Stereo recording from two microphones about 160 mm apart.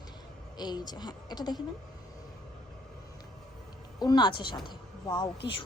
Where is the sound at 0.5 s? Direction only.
25° left (ahead or behind).